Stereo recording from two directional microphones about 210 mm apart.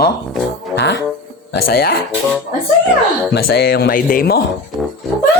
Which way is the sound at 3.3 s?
50° left (ahead or behind).